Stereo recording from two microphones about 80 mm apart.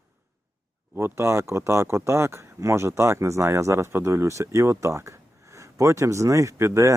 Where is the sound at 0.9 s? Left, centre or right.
Right.